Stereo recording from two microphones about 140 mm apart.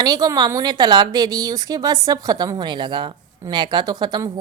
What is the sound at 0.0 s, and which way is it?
Speech, 30° right (ahead or behind).